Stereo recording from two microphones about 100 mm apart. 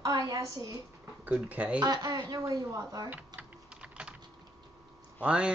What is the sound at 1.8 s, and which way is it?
Speech, 40° right (ahead or behind).